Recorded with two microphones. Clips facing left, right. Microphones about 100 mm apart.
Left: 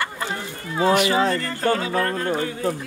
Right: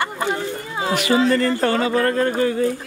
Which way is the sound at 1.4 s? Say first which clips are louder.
Right 4 dB; 65° right (ahead or behind).